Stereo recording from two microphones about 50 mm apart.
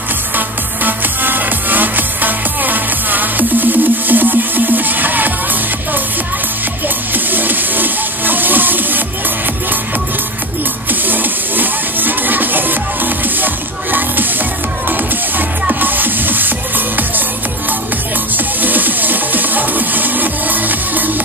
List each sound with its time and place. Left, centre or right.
0.4 s music: right
7.2 s music: right
10.9 s music: right
15.7 s music: right
18.3 s music: right